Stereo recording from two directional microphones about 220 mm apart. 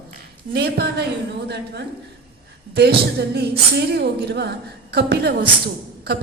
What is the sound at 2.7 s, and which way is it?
A woman's voice, 50° right (ahead or behind).